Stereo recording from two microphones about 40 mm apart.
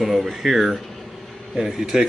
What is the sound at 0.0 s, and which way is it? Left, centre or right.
Speech, centre.